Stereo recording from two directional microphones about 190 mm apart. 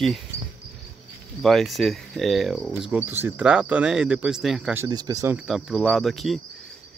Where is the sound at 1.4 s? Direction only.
Centre (ahead or behind).